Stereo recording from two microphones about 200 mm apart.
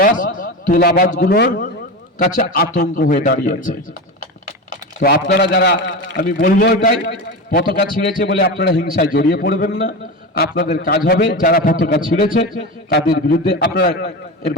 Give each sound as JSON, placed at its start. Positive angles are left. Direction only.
{"t": 0.0, "sound": "a man's voice", "side_deg": 45}